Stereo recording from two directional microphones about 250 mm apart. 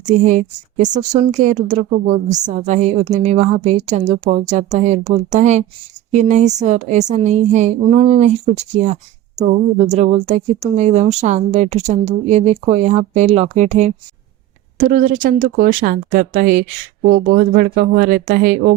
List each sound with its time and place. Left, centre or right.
0.0 s a woman's voice: right